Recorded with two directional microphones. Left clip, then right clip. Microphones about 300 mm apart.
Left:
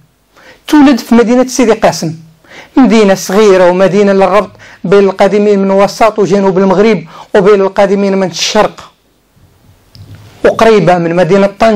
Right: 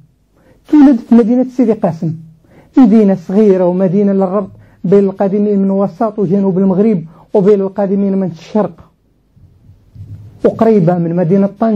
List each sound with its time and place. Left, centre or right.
0.4 s speech: centre
2.4 s a sound: centre
2.8 s a woman's voice: left
3.1 s a man's voice: centre
10.4 s a man's voice: centre